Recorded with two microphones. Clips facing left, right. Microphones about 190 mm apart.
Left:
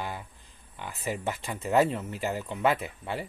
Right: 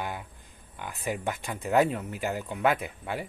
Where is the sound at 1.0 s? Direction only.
Centre (ahead or behind).